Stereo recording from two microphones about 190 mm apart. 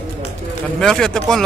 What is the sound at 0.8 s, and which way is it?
Speech, 5° left (ahead or behind).